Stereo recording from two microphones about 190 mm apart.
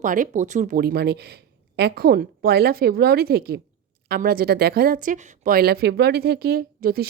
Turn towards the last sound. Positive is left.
turn(degrees=-50)  # may be behind; listen again after turning